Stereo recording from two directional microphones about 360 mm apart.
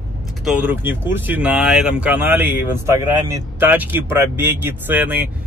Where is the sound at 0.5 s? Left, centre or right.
Centre.